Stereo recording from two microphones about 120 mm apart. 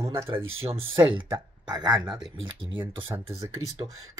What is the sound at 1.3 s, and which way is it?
Speech, 35° right (ahead or behind).